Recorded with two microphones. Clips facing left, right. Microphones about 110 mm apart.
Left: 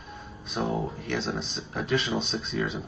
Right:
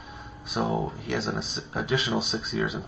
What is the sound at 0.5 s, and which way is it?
Speech, 5° right (ahead or behind).